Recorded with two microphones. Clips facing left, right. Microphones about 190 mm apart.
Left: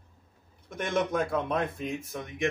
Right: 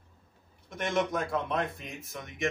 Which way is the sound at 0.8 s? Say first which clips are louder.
Left 2 dB; 50° left (ahead or behind).